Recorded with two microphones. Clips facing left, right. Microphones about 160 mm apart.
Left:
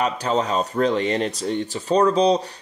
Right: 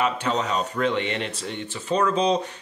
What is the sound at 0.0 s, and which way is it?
Speech, 35° left (ahead or behind).